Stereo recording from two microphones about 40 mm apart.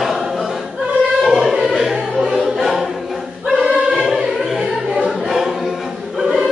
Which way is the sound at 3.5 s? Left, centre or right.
Centre.